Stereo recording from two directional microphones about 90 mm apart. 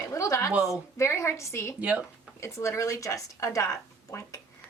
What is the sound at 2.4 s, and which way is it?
A woman's voice, 35° left (ahead or behind).